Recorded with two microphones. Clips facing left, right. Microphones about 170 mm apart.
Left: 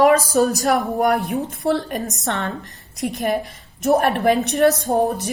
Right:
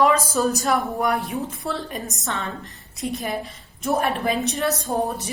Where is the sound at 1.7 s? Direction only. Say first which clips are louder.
Left 8 dB; 65° left (ahead or behind).